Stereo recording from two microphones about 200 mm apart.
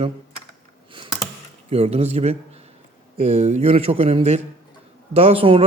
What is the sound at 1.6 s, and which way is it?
Speech, 30° right (ahead or behind).